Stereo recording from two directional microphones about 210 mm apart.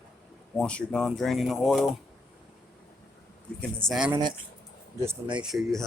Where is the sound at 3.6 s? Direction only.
5° left (ahead or behind).